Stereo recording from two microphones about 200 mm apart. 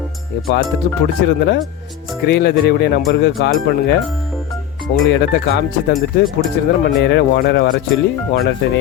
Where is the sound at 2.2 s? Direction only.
55° left (ahead or behind).